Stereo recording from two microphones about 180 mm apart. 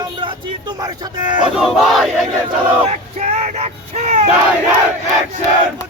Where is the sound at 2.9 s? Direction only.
35° right (ahead or behind).